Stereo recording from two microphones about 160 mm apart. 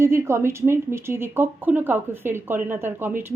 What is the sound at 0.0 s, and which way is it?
Speech, 15° right (ahead or behind).